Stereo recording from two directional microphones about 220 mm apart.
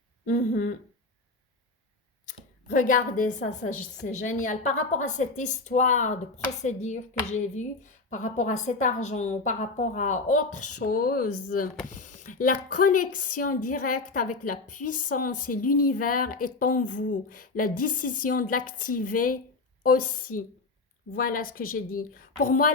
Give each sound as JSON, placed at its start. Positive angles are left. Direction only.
{"t": 0.3, "sound": "a woman's voice", "side_deg": 35}
{"t": 2.2, "sound": "a woman's voice", "side_deg": 35}
{"t": 20.3, "sound": "speech", "side_deg": 80}
{"t": 21.1, "sound": "a woman's voice", "side_deg": 40}